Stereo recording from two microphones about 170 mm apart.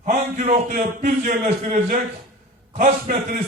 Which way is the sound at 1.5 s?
45° right (ahead or behind).